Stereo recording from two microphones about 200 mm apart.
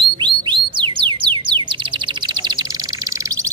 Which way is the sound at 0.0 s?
25° right (ahead or behind).